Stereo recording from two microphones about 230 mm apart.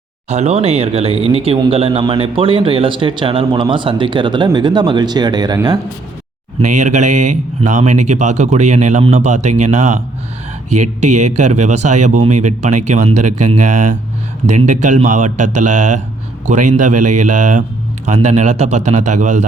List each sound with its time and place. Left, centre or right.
0.3 s speech: right
6.6 s speech: right
11.3 s speech: right